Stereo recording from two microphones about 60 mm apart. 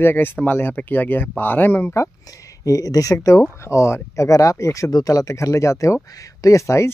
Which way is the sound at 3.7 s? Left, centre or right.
Left.